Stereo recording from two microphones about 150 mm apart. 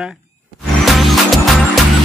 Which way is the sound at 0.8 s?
Centre (ahead or behind).